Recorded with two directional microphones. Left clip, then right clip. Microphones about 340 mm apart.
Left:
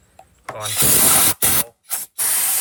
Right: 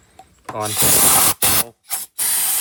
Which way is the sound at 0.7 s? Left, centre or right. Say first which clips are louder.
Right 1 dB; centre.